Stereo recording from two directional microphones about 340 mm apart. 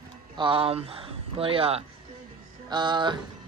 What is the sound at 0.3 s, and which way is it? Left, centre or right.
A man's voice, centre.